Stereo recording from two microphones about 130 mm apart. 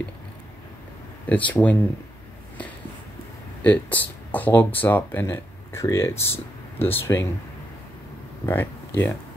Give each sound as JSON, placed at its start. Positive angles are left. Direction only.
{"t": 1.2, "sound": "speech", "side_deg": 15}
{"t": 3.6, "sound": "speech", "side_deg": 15}
{"t": 8.5, "sound": "speech", "side_deg": 15}